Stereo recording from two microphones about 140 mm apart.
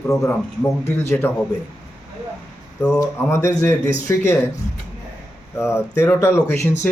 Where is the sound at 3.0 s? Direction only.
20° left (ahead or behind).